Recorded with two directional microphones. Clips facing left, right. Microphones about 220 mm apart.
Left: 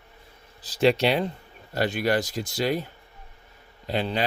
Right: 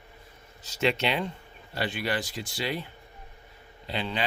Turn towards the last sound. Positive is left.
turn(degrees=40)  # may be behind; listen again after turning